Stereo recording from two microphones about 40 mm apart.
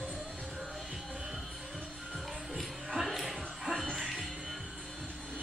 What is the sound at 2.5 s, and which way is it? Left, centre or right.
Music, centre.